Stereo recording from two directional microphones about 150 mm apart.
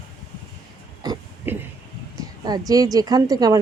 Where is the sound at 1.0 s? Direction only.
25° right (ahead or behind).